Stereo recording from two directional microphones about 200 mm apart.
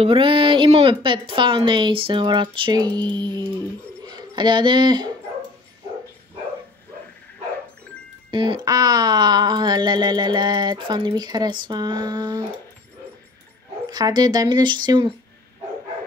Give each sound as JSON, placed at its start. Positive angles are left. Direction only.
{"t": 0.0, "sound": "speech", "side_deg": -25}
{"t": 8.3, "sound": "speech", "side_deg": -25}
{"t": 13.8, "sound": "speech", "side_deg": -20}